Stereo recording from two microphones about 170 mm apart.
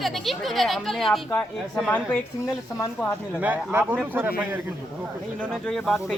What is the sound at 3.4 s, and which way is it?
Speech, 10° right (ahead or behind).